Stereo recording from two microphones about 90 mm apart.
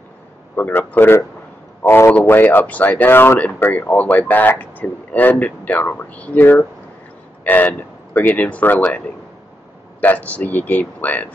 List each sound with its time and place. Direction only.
0.6 s speech: 20° left (ahead or behind)
3.3 s speech: 15° left (ahead or behind)